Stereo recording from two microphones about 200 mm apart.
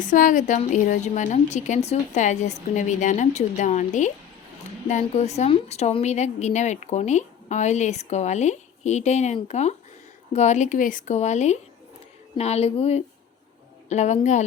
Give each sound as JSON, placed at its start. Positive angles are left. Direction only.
{"t": 0.0, "sound": "a woman's voice", "side_deg": 40}